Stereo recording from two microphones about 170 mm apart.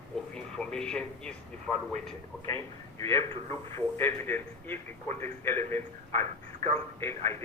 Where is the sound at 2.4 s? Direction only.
20° left (ahead or behind).